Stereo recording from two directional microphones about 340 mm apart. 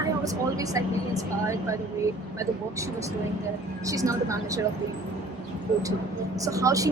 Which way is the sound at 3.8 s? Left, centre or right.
Centre.